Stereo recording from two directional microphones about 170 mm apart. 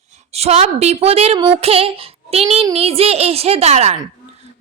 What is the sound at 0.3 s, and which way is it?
A woman's voice, 40° right (ahead or behind).